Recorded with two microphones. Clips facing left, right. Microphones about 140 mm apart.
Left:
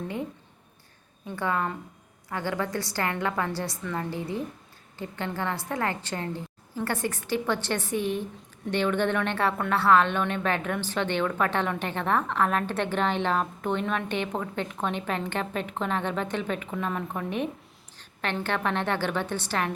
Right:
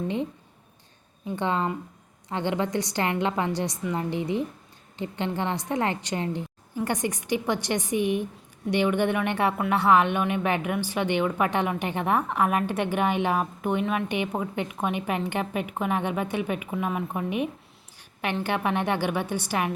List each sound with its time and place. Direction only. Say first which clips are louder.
1.4 s a woman's voice: right 2 dB; 20° right (ahead or behind)
17.9 s a sound: right 2 dB; 10° right (ahead or behind)
18.4 s speech: right 2 dB; 15° right (ahead or behind)